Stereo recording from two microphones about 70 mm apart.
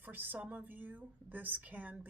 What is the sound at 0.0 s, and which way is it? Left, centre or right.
Speech, right.